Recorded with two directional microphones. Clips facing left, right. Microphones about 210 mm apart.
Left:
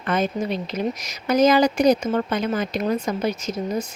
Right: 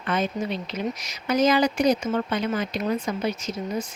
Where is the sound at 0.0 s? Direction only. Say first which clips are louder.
Left 3 dB; 45° left (ahead or behind).